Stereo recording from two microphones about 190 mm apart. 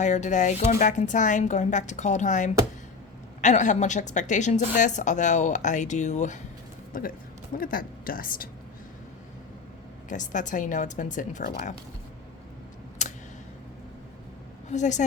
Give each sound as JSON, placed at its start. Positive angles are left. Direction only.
{"t": 0.0, "sound": "a woman's voice", "side_deg": 40}
{"t": 7.5, "sound": "speech", "side_deg": 50}
{"t": 10.1, "sound": "a woman's voice", "side_deg": 40}
{"t": 13.0, "sound": "a sound", "side_deg": 40}
{"t": 14.7, "sound": "a woman's voice", "side_deg": 40}